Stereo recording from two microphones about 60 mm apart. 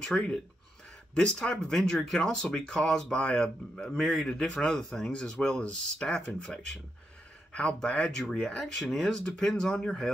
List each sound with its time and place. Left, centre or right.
0.0 s speech: centre
8.2 s speech: centre
8.5 s speech: centre